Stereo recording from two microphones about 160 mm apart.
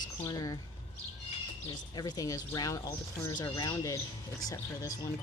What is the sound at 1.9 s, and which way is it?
Speech, 25° left (ahead or behind).